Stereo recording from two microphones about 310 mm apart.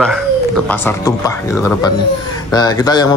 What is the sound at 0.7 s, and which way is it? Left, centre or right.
A man's voice, centre.